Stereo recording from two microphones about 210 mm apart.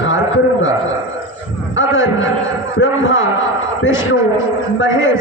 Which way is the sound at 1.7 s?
65° left (ahead or behind).